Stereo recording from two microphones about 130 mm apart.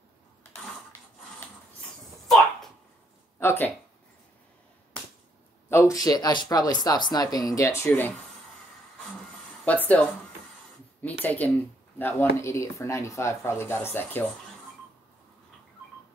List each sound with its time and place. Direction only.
2.2 s a sound: centre (ahead or behind)
3.3 s speech: 20° left (ahead or behind)
5.7 s speech: 25° left (ahead or behind)
9.7 s a woman's voice: 10° left (ahead or behind)